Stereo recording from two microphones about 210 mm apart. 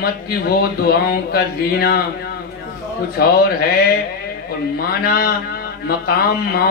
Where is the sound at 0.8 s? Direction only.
45° left (ahead or behind).